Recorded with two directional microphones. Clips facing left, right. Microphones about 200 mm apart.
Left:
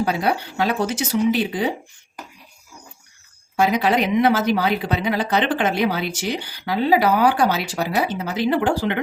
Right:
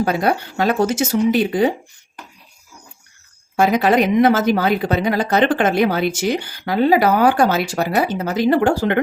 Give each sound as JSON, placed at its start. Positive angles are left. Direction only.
{"t": 0.0, "sound": "a woman's voice", "side_deg": -50}
{"t": 3.5, "sound": "a woman's voice", "side_deg": -50}